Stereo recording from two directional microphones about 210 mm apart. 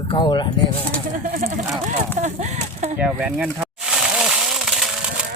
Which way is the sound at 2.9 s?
5° right (ahead or behind).